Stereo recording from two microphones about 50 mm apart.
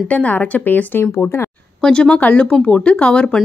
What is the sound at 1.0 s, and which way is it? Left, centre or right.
Speech, left.